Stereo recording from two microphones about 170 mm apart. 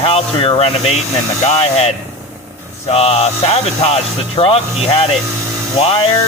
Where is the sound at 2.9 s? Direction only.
35° left (ahead or behind).